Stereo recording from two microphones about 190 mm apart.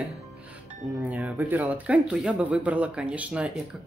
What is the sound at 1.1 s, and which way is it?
Speech, 10° right (ahead or behind).